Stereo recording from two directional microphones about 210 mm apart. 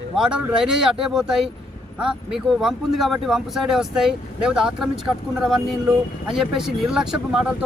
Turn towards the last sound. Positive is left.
turn(degrees=0)  # may be behind; listen again after turning